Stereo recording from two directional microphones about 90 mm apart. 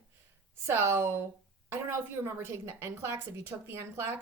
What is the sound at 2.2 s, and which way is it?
A woman's voice, 30° right (ahead or behind).